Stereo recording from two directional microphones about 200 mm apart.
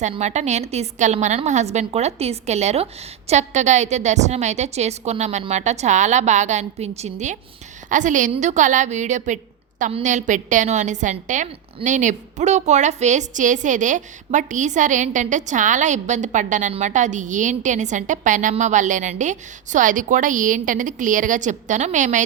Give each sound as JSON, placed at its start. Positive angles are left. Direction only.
{"t": 0.0, "sound": "a woman's voice", "side_deg": -35}